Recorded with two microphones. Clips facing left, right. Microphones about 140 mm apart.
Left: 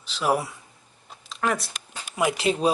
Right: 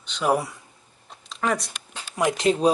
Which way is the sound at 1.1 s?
Centre (ahead or behind).